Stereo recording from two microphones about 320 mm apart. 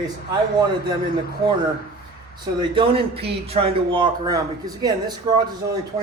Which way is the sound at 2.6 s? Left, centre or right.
Centre.